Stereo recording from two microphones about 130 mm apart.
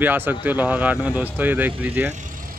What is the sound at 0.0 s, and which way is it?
Speech, 15° right (ahead or behind).